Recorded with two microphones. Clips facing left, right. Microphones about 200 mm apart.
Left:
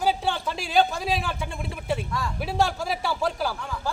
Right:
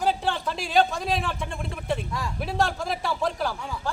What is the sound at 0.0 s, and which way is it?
A man's voice, centre (ahead or behind).